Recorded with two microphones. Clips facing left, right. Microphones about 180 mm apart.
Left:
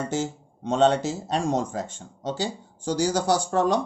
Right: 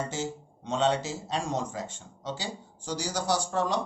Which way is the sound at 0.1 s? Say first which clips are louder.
Left 6 dB; 50° left (ahead or behind).